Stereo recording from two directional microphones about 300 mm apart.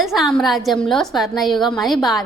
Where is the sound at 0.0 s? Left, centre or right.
Centre.